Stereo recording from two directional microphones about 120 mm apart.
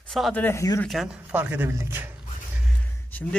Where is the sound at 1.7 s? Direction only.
20° right (ahead or behind).